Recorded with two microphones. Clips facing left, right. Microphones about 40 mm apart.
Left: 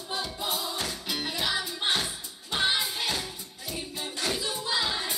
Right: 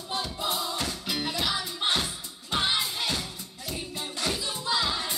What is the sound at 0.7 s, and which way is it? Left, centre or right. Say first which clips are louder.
Music: right 1 dB; left.